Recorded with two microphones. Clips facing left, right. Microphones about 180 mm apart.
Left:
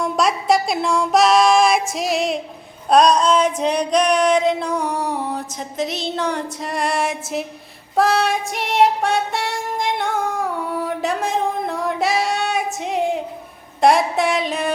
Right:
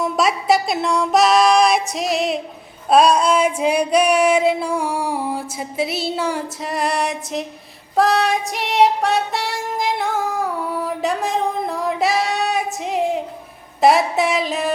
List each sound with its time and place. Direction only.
0.0 s music: 5° right (ahead or behind)
2.9 s female singing: 5° right (ahead or behind)
7.9 s music: centre (ahead or behind)